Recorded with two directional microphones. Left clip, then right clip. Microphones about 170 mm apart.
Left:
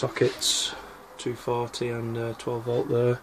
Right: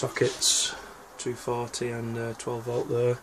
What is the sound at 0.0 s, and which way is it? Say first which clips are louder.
Speech: left 1 dB; 5° left (ahead or behind).